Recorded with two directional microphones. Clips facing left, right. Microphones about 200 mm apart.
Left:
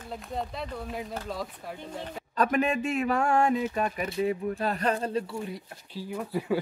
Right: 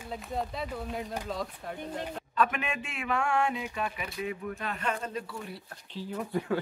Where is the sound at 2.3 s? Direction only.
40° left (ahead or behind).